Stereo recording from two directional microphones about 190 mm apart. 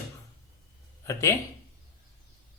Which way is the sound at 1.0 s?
15° left (ahead or behind).